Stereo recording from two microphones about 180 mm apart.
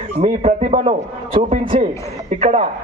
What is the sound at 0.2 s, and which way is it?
A man's voice, 35° right (ahead or behind).